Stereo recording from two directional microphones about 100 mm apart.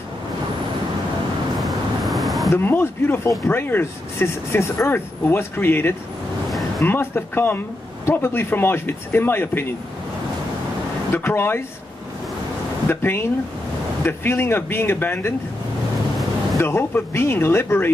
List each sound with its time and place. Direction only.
1.6 s vehicle: centre (ahead or behind)
2.5 s speech: 20° left (ahead or behind)
11.1 s speech: 20° left (ahead or behind)
12.8 s speech: 20° left (ahead or behind)
16.5 s speech: 25° left (ahead or behind)